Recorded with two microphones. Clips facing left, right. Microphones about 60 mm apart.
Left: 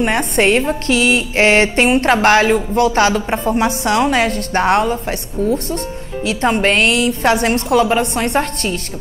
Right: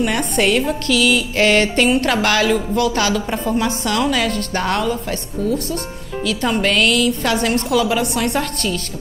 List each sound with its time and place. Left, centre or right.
0.0 s a woman's voice: left